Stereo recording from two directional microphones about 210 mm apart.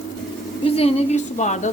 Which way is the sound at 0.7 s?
30° left (ahead or behind).